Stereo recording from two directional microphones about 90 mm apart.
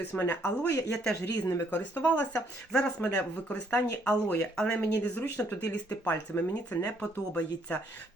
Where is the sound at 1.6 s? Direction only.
20° left (ahead or behind).